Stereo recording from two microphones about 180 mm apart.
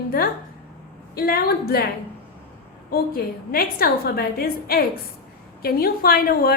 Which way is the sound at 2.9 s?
55° left (ahead or behind).